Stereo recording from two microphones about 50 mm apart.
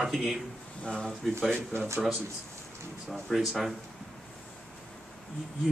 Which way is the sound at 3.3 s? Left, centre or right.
Centre.